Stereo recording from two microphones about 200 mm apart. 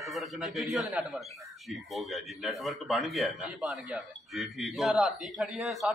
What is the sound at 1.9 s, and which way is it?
A man's voice, centre (ahead or behind).